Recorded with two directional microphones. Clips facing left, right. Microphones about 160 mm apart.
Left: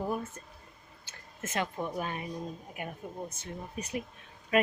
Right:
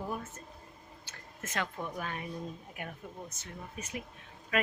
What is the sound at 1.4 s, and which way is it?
Speech, 20° left (ahead or behind).